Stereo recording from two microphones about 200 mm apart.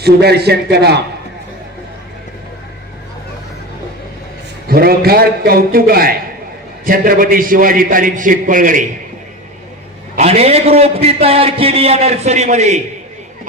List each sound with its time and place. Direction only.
0.0 s a man's voice: 55° right (ahead or behind)
4.7 s a man's voice: 50° right (ahead or behind)
10.2 s a man's voice: 30° right (ahead or behind)